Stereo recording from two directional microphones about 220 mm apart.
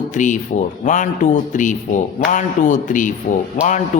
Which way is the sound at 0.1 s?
35° left (ahead or behind).